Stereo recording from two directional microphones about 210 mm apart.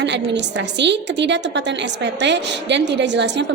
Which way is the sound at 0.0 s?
55° right (ahead or behind).